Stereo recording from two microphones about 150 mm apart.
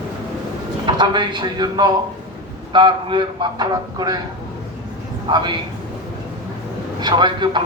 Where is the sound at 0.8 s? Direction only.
30° right (ahead or behind).